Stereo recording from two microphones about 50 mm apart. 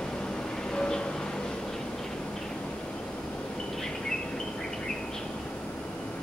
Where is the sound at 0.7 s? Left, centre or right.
Centre.